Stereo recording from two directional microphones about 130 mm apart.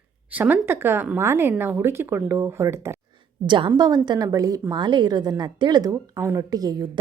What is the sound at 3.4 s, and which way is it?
A woman's voice, 40° right (ahead or behind).